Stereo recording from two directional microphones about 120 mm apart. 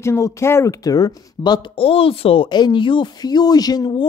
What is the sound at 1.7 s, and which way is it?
Speech, 50° left (ahead or behind).